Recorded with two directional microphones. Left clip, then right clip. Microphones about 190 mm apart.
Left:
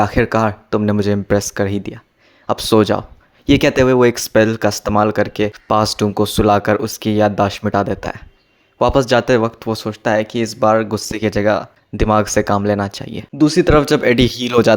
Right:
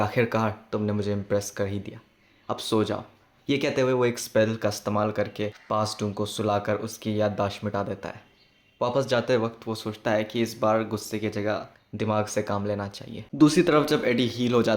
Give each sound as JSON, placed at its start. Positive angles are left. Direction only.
{"t": 0.0, "sound": "speech", "side_deg": 40}
{"t": 13.4, "sound": "speech", "side_deg": 25}
{"t": 13.7, "sound": "speech", "side_deg": 40}